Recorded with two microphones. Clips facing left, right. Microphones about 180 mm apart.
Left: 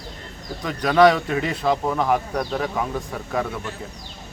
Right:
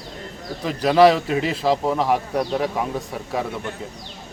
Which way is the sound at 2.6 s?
5° right (ahead or behind).